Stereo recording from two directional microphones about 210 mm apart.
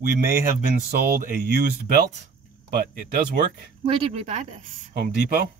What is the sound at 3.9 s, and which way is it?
Speech, 30° right (ahead or behind).